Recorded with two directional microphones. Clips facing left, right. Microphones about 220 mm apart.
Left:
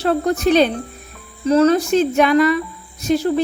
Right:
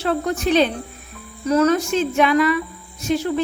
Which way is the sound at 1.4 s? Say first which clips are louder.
Left 3 dB; 30° left (ahead or behind).